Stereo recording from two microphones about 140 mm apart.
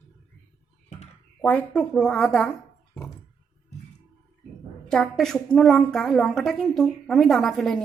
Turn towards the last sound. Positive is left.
turn(degrees=0)  # may be behind; listen again after turning